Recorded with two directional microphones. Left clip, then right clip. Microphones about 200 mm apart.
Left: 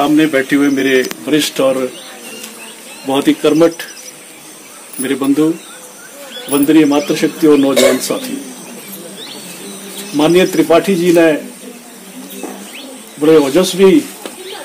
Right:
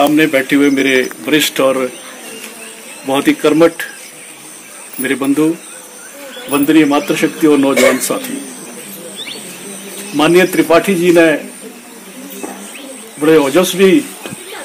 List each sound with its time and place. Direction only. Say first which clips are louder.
0.1 s speech: even; 40° right (ahead or behind); by 1.0 s 25° right (ahead or behind)
1.2 s speech: right 1 dB; 5° right (ahead or behind)
3.1 s a man's voice: even; 10° left (ahead or behind)
5.0 s a man's voice: even; 10° left (ahead or behind)
6.5 s a man's voice: even; 10° left (ahead or behind)
10.1 s a man's voice: right 1 dB; 10° left (ahead or behind)
13.2 s a man's voice: even; 10° left (ahead or behind)